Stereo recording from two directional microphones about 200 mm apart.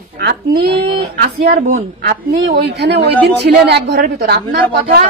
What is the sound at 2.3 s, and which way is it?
A woman's voice, 60° right (ahead or behind).